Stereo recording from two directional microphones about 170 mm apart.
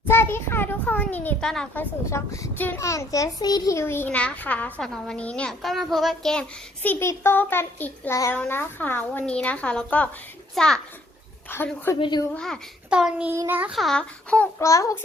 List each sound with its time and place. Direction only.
0.1 s a child's voice: 15° left (ahead or behind)
6.8 s a child's voice: 15° left (ahead or behind)
11.9 s a child's voice: 30° left (ahead or behind)
12.3 s speech: 5° left (ahead or behind)
12.9 s child singing: 5° right (ahead or behind)
13.7 s speech: 5° left (ahead or behind)
14.6 s a child's voice: 20° left (ahead or behind)